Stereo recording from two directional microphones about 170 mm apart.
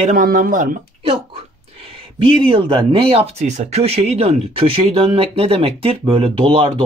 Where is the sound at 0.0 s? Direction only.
50° right (ahead or behind).